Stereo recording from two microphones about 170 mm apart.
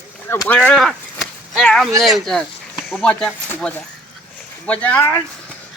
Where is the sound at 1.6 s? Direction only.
5° left (ahead or behind).